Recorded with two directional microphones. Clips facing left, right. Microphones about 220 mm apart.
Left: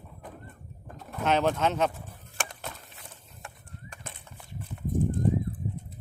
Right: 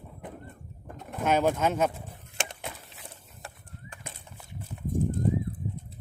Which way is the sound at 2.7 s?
5° right (ahead or behind).